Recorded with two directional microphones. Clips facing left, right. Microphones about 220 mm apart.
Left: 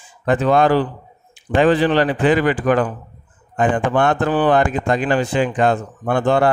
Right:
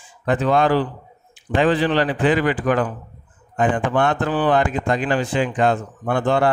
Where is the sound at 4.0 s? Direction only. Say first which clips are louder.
Left 3 dB; 50° left (ahead or behind).